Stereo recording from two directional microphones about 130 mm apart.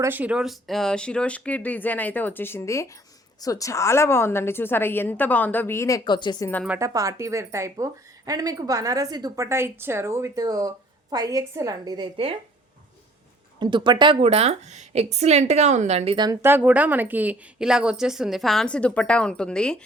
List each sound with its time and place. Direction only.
0.0 s a woman's voice: 15° right (ahead or behind); by 6.0 s 20° left (ahead or behind)
6.1 s speech: 35° left (ahead or behind)
6.7 s a woman's voice: 25° right (ahead or behind)
13.6 s speech: 35° right (ahead or behind)
14.2 s a woman's voice: 50° right (ahead or behind)
16.1 s speech: 30° right (ahead or behind)
16.4 s a woman's voice: 15° right (ahead or behind); by 19.8 s 5° left (ahead or behind)